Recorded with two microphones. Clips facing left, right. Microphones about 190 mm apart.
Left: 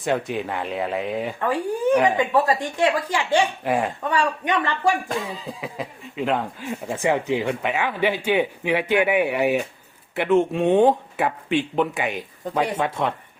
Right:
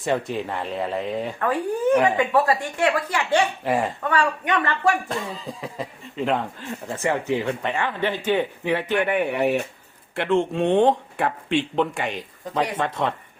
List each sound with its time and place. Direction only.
0.0 s speech: centre (ahead or behind)
1.4 s speech: 15° left (ahead or behind)
3.6 s speech: centre (ahead or behind)
4.1 s speech: 15° left (ahead or behind)
5.0 s speech: centre (ahead or behind)